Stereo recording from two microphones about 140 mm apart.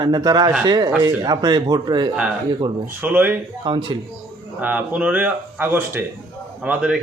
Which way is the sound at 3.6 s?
35° right (ahead or behind).